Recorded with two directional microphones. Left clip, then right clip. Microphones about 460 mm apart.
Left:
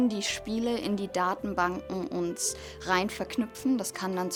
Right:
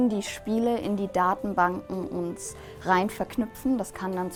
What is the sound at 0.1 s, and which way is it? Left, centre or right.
A woman's voice, centre.